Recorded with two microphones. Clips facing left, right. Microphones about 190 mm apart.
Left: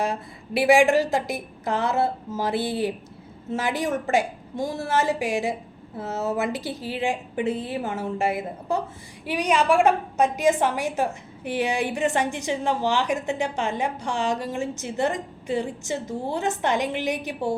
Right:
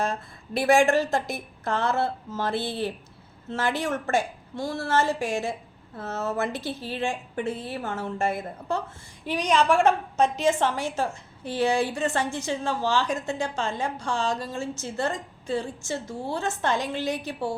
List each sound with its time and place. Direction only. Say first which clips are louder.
0.0 s a woman's voice: left 2 dB; 10° left (ahead or behind)